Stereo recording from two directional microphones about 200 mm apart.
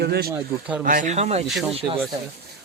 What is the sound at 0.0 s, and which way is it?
Speech, 55° right (ahead or behind).